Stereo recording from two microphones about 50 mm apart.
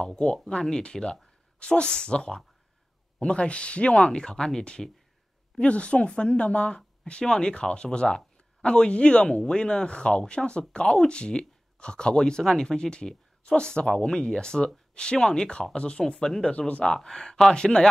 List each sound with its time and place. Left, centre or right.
0.0 s a woman's voice: centre
16.5 s a woman's voice: left
16.9 s speech: centre